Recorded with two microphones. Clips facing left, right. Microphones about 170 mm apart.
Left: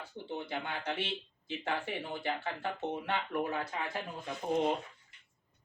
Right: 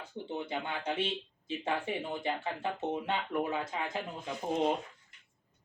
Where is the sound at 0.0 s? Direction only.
20° right (ahead or behind).